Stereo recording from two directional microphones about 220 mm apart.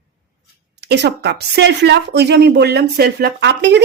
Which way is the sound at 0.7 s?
50° right (ahead or behind).